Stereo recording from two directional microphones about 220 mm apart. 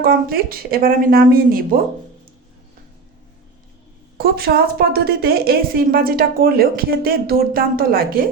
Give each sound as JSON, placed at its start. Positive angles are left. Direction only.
{"t": 0.0, "sound": "speech", "side_deg": -40}
{"t": 4.2, "sound": "a woman's voice", "side_deg": -45}